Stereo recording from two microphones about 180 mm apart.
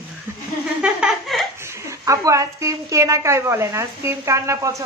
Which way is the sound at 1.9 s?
15° right (ahead or behind).